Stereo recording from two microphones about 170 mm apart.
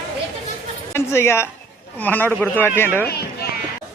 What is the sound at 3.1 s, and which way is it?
Children playing, 65° left (ahead or behind).